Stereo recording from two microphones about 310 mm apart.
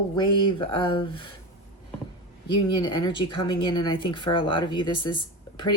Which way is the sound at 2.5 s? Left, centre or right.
Centre.